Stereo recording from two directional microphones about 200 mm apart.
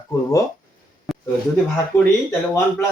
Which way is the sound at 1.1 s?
Centre (ahead or behind).